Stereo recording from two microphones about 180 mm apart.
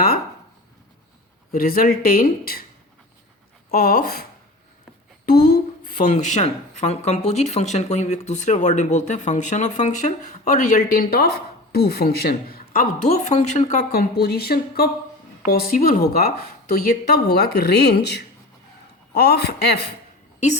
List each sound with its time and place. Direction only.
1.5 s speech: 55° left (ahead or behind)
3.7 s speech: 55° left (ahead or behind)
10.6 s speech: 50° left (ahead or behind)
13.9 s speech: 60° left (ahead or behind)